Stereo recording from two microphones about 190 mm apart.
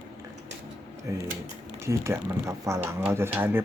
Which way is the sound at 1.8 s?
15° right (ahead or behind).